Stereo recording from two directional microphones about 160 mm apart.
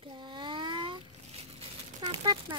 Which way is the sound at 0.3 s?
30° right (ahead or behind).